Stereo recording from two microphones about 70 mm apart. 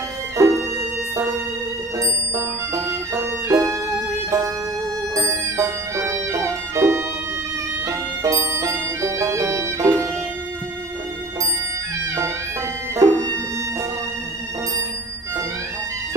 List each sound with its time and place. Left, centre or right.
0.3 s music: right
13.0 s music: right